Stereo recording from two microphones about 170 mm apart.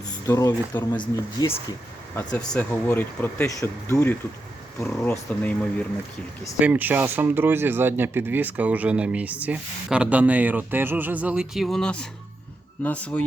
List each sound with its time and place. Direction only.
0.3 s speech: 20° left (ahead or behind)
2.1 s speech: 10° left (ahead or behind)
6.6 s speech: 10° right (ahead or behind); by 13.2 s 10° left (ahead or behind)